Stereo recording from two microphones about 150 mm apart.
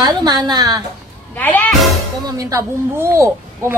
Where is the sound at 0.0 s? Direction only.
30° right (ahead or behind).